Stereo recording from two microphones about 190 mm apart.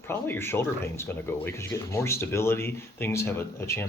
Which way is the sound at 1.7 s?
15° left (ahead or behind).